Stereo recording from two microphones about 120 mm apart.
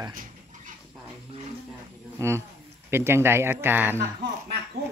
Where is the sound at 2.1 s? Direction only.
20° right (ahead or behind).